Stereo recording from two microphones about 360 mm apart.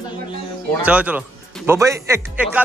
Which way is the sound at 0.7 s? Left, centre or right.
Centre.